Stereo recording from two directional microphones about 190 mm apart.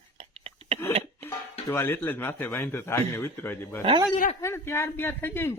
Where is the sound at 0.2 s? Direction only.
30° right (ahead or behind).